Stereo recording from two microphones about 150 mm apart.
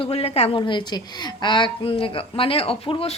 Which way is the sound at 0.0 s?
40° left (ahead or behind).